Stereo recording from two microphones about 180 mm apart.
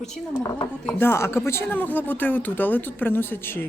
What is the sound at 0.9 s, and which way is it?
Speech, 10° left (ahead or behind).